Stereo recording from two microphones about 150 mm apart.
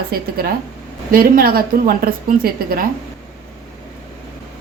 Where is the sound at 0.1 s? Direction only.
90° right.